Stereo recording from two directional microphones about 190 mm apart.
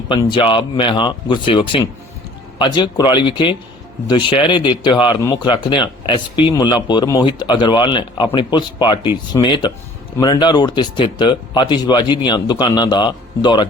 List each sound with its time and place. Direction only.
0.1 s speech: 25° left (ahead or behind)